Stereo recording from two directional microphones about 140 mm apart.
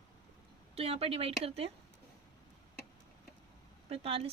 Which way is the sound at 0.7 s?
45° right (ahead or behind).